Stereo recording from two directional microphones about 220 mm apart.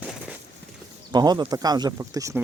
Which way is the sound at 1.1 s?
20° right (ahead or behind).